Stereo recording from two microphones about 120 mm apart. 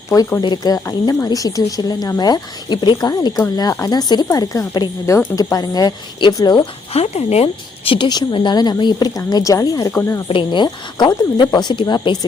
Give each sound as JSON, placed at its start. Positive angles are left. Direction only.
{"t": 0.4, "sound": "speech", "side_deg": 35}
{"t": 6.9, "sound": "speech", "side_deg": 65}
{"t": 10.2, "sound": "speech", "side_deg": 45}